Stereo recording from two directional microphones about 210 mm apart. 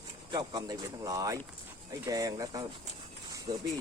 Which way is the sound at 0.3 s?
20° right (ahead or behind).